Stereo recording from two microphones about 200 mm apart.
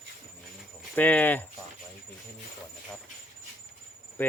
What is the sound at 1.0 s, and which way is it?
Speech, 10° left (ahead or behind).